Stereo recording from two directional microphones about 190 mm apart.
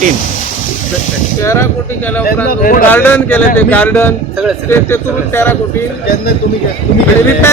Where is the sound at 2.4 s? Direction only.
45° left (ahead or behind).